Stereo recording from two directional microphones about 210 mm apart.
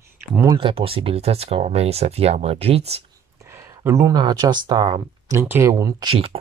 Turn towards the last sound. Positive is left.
turn(degrees=-25)  # may be behind; listen again after turning